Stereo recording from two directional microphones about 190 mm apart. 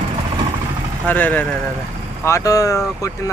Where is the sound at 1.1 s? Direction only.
10° left (ahead or behind).